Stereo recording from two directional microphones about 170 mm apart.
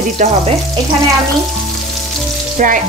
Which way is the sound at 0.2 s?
45° right (ahead or behind).